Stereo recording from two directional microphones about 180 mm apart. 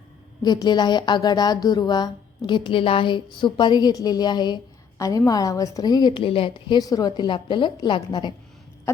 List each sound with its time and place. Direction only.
0.4 s a woman's voice: 25° left (ahead or behind)